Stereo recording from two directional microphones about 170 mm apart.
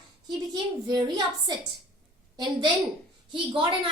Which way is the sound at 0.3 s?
25° right (ahead or behind).